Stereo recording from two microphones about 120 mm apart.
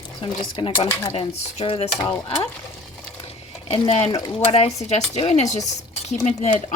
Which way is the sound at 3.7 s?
55° left (ahead or behind).